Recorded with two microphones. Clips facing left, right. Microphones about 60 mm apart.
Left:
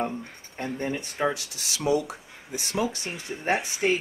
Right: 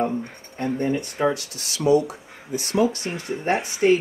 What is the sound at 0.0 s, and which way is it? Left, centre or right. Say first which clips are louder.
Speech: right 6 dB; centre.